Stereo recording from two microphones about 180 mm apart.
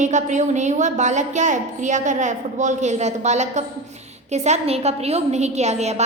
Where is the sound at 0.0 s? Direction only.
40° right (ahead or behind).